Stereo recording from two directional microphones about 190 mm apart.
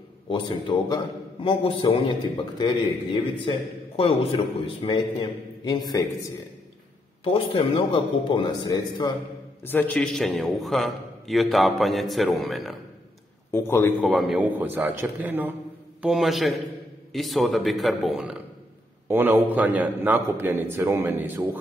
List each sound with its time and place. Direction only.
0.3 s a man's voice: 25° left (ahead or behind)
7.3 s a man's voice: 25° left (ahead or behind)
9.6 s a man's voice: 10° left (ahead or behind)
13.5 s a man's voice: 15° left (ahead or behind)
14.0 s a man's voice: centre (ahead or behind)